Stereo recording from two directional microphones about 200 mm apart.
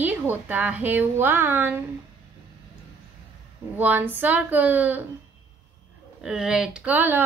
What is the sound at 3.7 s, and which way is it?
A woman's voice, 10° right (ahead or behind).